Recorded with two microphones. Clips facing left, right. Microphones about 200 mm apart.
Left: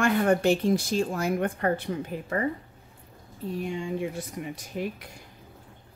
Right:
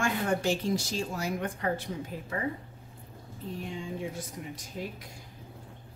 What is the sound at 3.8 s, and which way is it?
Speech, 65° left (ahead or behind).